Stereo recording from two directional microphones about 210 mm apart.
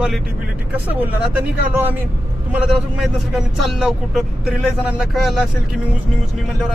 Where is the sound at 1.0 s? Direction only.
10° right (ahead or behind).